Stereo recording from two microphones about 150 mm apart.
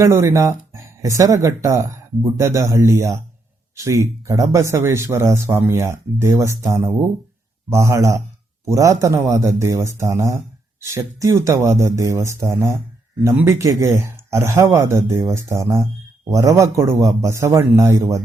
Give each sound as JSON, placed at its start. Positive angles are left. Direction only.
{"t": 0.0, "sound": "speech", "side_deg": -20}